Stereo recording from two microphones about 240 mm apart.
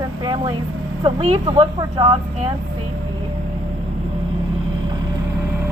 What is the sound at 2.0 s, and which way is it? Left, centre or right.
Speech, right.